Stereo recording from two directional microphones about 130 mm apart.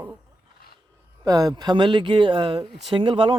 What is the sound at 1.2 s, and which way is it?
Speech, 25° right (ahead or behind).